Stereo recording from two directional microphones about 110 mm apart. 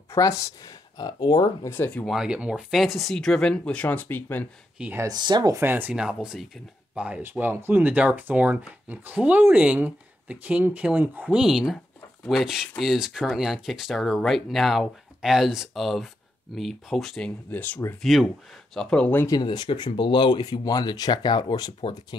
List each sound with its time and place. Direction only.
0.1 s speech: 30° left (ahead or behind)
1.6 s speech: 20° left (ahead or behind)
2.0 s speech: 5° right (ahead or behind); by 4.5 s 15° left (ahead or behind)
5.0 s speech: 40° right (ahead or behind)
5.6 s speech: 20° right (ahead or behind)
7.1 s speech: 20° right (ahead or behind); by 17.3 s 5° left (ahead or behind)
17.5 s speech: 15° left (ahead or behind)
18.0 s speech: centre (ahead or behind)
18.8 s speech: 10° left (ahead or behind)
19.4 s speech: 40° left (ahead or behind)